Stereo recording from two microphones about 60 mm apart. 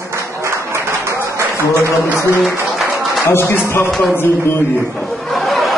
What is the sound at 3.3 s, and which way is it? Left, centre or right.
Speech, left.